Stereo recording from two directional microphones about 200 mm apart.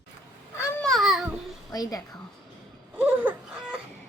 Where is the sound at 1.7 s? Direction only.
20° left (ahead or behind).